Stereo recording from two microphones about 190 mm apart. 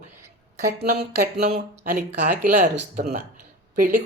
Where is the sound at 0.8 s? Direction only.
50° right (ahead or behind).